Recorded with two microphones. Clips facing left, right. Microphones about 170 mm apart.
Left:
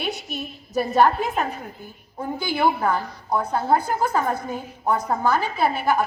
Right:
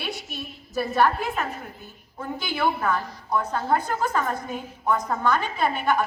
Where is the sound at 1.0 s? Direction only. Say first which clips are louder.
Left 3 dB; 20° left (ahead or behind).